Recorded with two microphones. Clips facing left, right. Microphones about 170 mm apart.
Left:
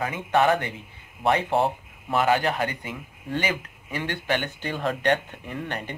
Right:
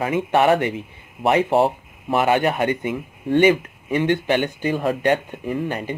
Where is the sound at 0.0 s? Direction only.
25° right (ahead or behind).